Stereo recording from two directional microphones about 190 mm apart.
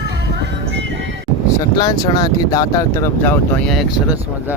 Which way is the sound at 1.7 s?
20° left (ahead or behind).